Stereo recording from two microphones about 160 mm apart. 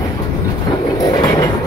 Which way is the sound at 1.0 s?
20° left (ahead or behind).